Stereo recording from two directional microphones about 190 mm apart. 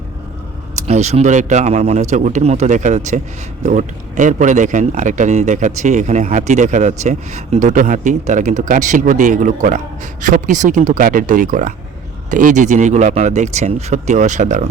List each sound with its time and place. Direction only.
0.8 s speech: 35° right (ahead or behind)